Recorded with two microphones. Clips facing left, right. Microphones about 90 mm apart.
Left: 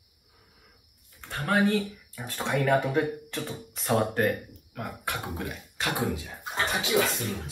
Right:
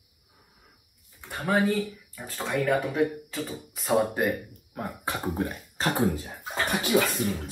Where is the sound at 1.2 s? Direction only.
10° right (ahead or behind).